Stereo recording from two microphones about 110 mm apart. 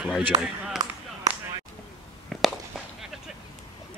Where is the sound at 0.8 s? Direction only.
35° right (ahead or behind).